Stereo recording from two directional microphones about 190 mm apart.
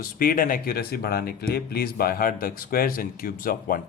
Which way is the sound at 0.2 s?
50° left (ahead or behind).